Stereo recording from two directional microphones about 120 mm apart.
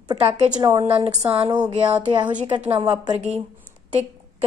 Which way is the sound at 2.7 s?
45° right (ahead or behind).